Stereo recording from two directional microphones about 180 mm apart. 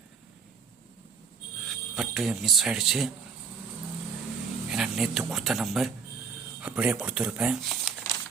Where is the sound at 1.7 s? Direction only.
Centre (ahead or behind).